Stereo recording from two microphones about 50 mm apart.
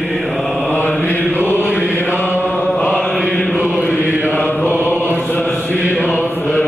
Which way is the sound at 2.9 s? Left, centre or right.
Left.